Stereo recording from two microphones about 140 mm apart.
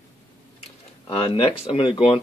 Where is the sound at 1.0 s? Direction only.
40° left (ahead or behind).